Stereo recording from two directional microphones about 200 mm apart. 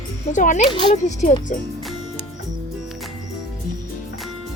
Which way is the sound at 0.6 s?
25° left (ahead or behind).